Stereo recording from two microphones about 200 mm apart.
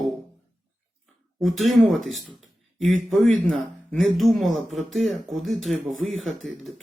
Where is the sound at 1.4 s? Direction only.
Centre (ahead or behind).